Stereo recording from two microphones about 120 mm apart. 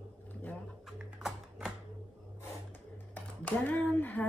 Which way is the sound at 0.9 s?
Centre (ahead or behind).